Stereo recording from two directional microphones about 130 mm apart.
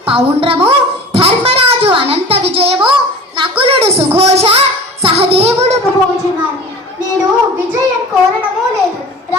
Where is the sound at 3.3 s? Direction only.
40° right (ahead or behind).